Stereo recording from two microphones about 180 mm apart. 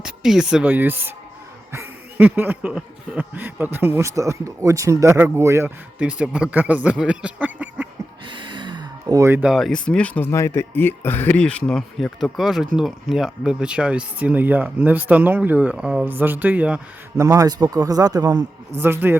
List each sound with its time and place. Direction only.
0.0 s speech: 5° right (ahead or behind)
1.7 s a sound: 10° right (ahead or behind)
8.3 s gasp: 25° right (ahead or behind); by 9.7 s centre (ahead or behind)
9.8 s speech: 5° left (ahead or behind)
17.2 s a man's voice: 20° right (ahead or behind)
18.8 s a sound: 10° right (ahead or behind)